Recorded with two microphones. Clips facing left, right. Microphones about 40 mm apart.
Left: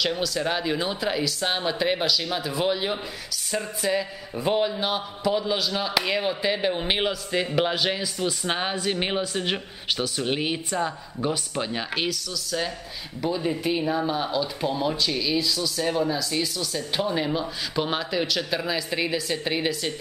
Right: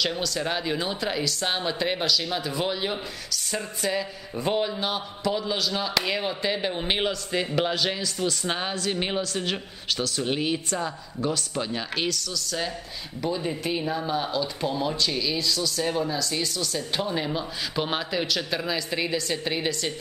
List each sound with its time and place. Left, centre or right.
0.0 s speech: centre